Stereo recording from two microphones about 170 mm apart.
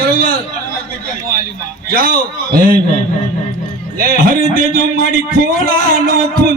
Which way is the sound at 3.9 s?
60° right (ahead or behind).